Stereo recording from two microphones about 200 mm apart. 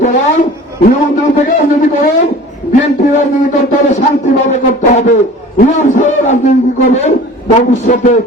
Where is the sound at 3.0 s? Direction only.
40° left (ahead or behind).